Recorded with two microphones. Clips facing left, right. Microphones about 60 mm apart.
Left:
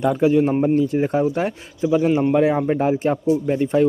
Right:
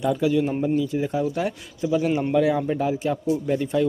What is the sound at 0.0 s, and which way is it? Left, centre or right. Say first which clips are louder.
A man's voice: left 5 dB; left.